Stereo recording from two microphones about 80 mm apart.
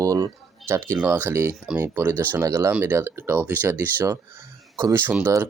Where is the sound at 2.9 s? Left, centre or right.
Right.